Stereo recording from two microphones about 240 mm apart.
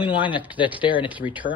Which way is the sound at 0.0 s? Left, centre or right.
Left.